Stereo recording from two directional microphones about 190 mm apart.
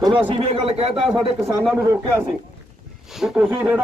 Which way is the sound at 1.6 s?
Centre (ahead or behind).